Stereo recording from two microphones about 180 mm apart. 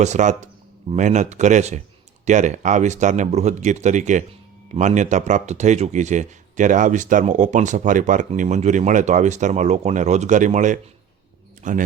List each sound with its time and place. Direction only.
0.0 s speech: 40° right (ahead or behind)